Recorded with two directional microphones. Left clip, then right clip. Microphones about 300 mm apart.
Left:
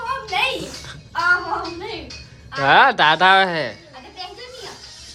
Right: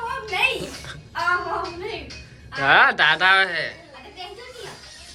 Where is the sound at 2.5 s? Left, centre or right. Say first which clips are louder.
Left 2 dB; centre.